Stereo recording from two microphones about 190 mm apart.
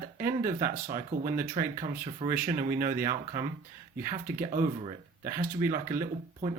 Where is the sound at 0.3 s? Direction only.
45° right (ahead or behind).